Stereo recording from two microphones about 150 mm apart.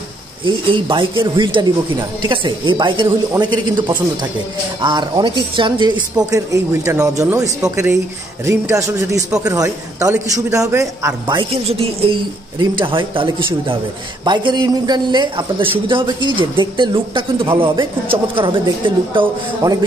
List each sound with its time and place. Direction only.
0.5 s a man's voice: 35° right (ahead or behind)
11.6 s a man's voice: 40° right (ahead or behind)
19.6 s a woman's voice: 20° right (ahead or behind)